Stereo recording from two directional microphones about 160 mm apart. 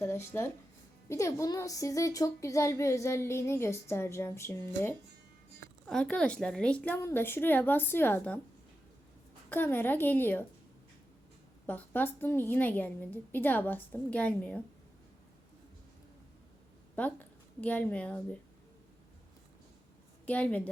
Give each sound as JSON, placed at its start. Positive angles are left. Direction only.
{"t": 0.0, "sound": "speech", "side_deg": 15}
{"t": 5.8, "sound": "speech", "side_deg": 5}
{"t": 9.5, "sound": "speech", "side_deg": 10}
{"t": 11.6, "sound": "speech", "side_deg": 10}
{"t": 16.9, "sound": "a woman's voice", "side_deg": 10}
{"t": 20.2, "sound": "speech", "side_deg": 10}